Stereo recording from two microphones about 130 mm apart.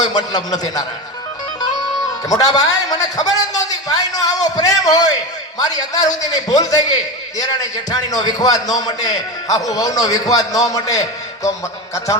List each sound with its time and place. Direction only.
0.0 s a man's voice: 30° left (ahead or behind)
2.3 s a man's voice: 30° left (ahead or behind)